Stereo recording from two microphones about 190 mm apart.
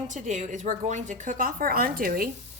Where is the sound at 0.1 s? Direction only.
40° right (ahead or behind).